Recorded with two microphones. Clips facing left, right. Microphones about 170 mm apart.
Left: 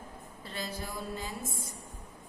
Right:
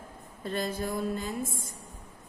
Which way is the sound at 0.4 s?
50° right (ahead or behind).